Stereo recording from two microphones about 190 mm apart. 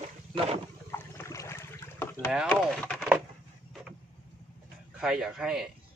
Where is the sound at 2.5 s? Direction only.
5° left (ahead or behind).